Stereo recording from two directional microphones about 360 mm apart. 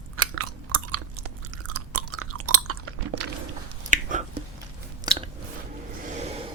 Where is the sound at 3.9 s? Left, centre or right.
Centre.